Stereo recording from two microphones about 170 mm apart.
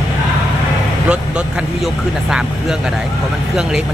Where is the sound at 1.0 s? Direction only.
5° right (ahead or behind).